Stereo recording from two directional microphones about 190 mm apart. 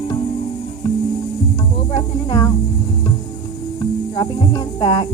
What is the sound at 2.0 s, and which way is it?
Speech, 20° left (ahead or behind).